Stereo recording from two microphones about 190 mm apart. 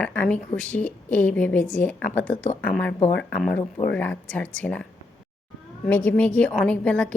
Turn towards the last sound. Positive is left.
turn(degrees=5)  # may be behind; listen again after turning